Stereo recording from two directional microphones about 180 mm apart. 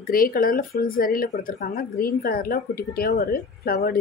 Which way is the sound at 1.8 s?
60° left (ahead or behind).